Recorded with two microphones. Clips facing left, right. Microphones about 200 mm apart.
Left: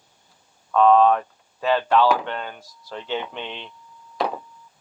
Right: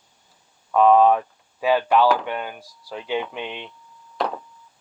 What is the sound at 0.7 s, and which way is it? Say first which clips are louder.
Speech: right 1 dB; 10° right (ahead or behind).